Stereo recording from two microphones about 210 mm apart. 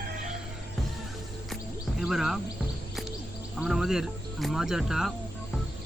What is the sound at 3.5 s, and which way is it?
Music, centre (ahead or behind).